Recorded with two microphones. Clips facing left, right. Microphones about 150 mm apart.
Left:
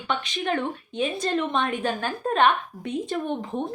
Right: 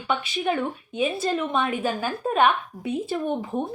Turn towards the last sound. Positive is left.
turn(degrees=-5)  # may be behind; listen again after turning